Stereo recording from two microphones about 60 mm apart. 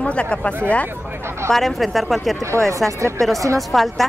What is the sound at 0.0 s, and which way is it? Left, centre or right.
Speech, centre.